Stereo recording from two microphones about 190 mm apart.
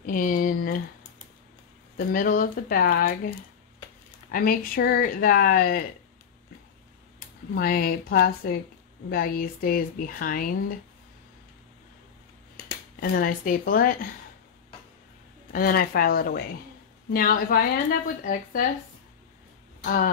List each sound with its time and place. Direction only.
0.0 s a woman's voice: 45° left (ahead or behind)
2.0 s a woman's voice: 50° left (ahead or behind)
4.3 s a woman's voice: 50° left (ahead or behind)
7.5 s a woman's voice: 50° left (ahead or behind)
13.0 s a woman's voice: 50° left (ahead or behind)
15.5 s a woman's voice: 50° left (ahead or behind)
19.8 s speech: 45° left (ahead or behind)